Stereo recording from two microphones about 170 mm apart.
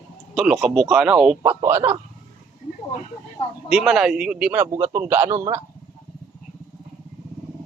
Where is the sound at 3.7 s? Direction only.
5° right (ahead or behind).